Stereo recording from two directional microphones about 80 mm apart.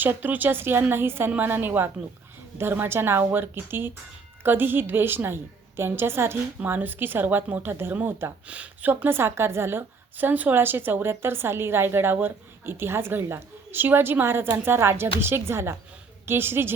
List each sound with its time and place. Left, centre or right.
0.0 s speech: right